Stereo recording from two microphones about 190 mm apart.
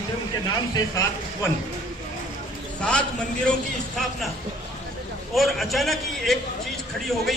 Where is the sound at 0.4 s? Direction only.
20° left (ahead or behind).